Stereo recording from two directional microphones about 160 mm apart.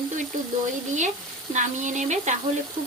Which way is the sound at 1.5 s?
50° right (ahead or behind).